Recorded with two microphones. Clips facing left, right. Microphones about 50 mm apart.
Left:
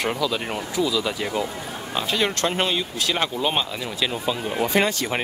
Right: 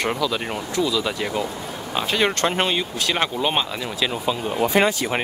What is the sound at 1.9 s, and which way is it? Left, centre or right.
Speech, centre.